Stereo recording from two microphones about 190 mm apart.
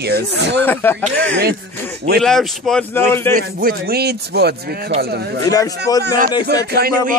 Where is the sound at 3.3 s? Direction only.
50° right (ahead or behind).